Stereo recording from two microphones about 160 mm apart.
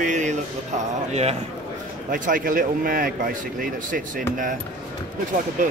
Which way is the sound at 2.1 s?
60° right (ahead or behind).